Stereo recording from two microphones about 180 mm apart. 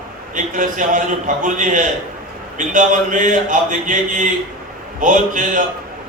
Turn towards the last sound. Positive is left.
turn(degrees=-45)  # may be behind; listen again after turning